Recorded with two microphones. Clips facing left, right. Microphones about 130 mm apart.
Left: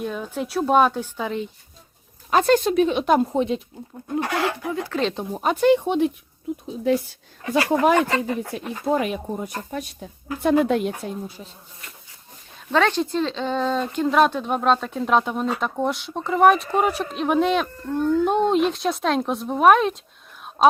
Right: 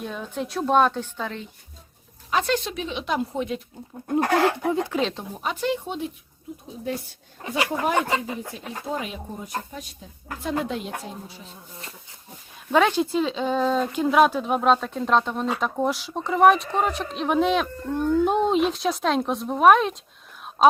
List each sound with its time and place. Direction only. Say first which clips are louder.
0.0 s a woman's voice: left 3 dB; centre (ahead or behind)
2.3 s speech: left 7 dB; 45° left (ahead or behind)
3.3 s speech: left 6 dB; 30° left (ahead or behind)
4.2 s speech: right 4 dB; 40° right (ahead or behind)
4.7 s speech: right 3 dB; 20° right (ahead or behind)
5.3 s speech: left 9 dB; 45° left (ahead or behind); by 6.1 s 65° left (ahead or behind)
6.5 s speech: left 9 dB; 90° left
7.4 s speech: left 4 dB; 45° right (ahead or behind)
7.9 s speech: left 3 dB; 10° right (ahead or behind)
8.5 s speech: left 10 dB; 60° left (ahead or behind)
12.7 s speech: even; 10° right (ahead or behind)